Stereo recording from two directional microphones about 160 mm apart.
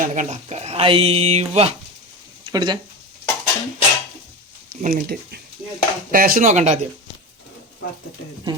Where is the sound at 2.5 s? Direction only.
25° right (ahead or behind).